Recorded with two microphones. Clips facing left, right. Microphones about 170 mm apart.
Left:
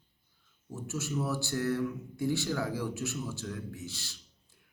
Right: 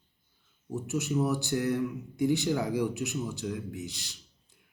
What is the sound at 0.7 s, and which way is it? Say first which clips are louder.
A man's voice: right 5 dB; 15° right (ahead or behind).